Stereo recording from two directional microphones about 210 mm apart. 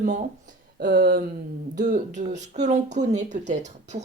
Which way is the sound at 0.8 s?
50° right (ahead or behind).